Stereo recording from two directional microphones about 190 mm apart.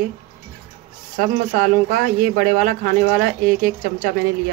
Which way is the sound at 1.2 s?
45° right (ahead or behind).